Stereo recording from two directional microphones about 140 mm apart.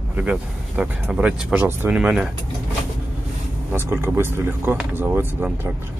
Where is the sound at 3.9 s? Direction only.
15° right (ahead or behind).